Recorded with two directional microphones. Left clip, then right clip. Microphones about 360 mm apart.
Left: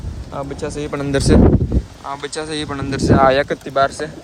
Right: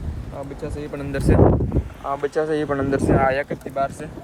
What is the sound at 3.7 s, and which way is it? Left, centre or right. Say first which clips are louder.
Speech: left 8 dB; centre.